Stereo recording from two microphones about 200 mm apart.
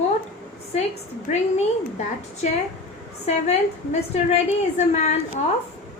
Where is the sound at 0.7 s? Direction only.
30° left (ahead or behind).